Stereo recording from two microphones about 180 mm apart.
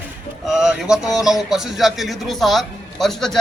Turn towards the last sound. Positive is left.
turn(degrees=0)  # may be behind; listen again after turning